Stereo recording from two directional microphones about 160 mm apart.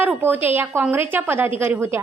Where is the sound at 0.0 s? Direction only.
10° right (ahead or behind).